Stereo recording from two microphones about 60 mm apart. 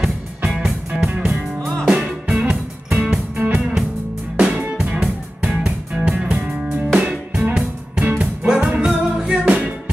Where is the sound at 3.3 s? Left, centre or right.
Centre.